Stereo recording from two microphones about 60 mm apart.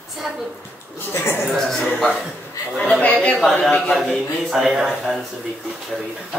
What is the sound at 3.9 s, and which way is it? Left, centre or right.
A man's voice, centre.